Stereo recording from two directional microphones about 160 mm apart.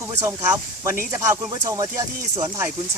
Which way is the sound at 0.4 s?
15° right (ahead or behind).